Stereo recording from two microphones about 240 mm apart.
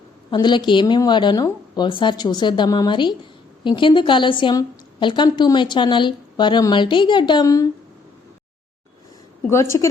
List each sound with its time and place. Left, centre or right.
0.3 s a woman's voice: centre
9.5 s a woman's voice: centre